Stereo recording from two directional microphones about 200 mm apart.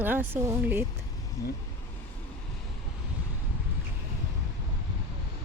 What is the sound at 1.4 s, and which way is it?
Speech, 15° left (ahead or behind).